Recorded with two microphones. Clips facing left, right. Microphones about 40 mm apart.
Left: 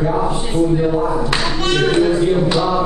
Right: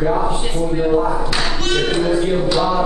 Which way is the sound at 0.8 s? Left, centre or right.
Centre.